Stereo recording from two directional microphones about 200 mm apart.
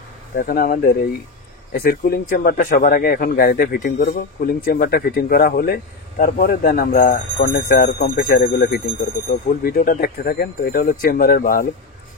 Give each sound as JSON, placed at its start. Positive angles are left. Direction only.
{"t": 0.4, "sound": "speech", "side_deg": 45}